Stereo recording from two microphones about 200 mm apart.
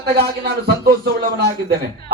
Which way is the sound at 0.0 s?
55° right (ahead or behind).